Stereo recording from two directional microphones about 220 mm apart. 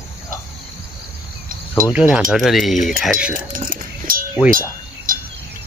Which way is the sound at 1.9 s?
5° right (ahead or behind).